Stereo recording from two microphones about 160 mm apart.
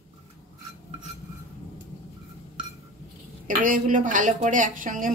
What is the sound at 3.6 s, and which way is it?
A woman's voice, 55° right (ahead or behind).